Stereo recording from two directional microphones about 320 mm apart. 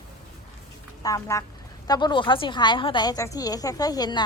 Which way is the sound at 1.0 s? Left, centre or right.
Centre.